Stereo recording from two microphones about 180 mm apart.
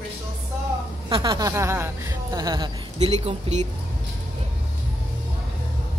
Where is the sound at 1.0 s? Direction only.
25° right (ahead or behind).